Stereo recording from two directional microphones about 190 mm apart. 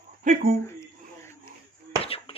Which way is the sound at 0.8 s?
15° left (ahead or behind).